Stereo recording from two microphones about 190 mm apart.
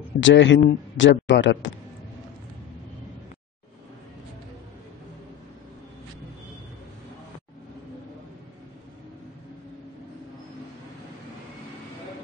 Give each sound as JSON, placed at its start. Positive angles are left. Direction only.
{"t": 0.2, "sound": "speech", "side_deg": 75}